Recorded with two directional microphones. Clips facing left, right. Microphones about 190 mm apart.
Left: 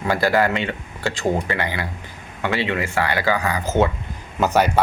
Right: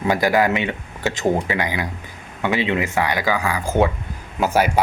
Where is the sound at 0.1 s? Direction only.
15° right (ahead or behind).